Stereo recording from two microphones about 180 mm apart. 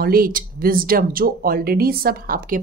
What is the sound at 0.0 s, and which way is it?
Speech, 55° right (ahead or behind).